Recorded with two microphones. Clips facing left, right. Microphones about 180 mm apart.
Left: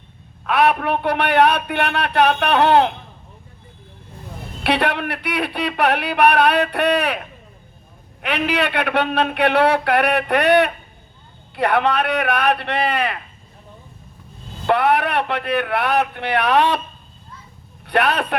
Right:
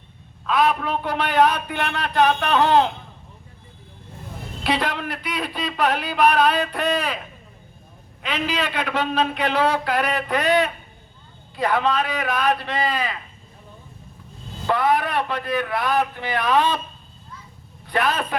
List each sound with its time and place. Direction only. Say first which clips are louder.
0.4 s speech: left 3 dB; 65° left (ahead or behind)
4.6 s speech: left 4 dB; 65° left (ahead or behind)
8.2 s speech: left 4 dB; 65° left (ahead or behind)
14.7 s a man's voice: left 3 dB; 65° left (ahead or behind)
17.8 s a man's voice: left 4 dB; 65° left (ahead or behind)